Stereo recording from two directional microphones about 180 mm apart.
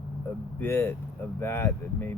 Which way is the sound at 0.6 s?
15° left (ahead or behind).